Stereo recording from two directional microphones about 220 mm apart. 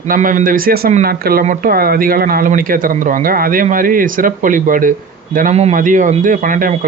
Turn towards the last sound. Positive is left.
turn(degrees=-40)  # may be behind; listen again after turning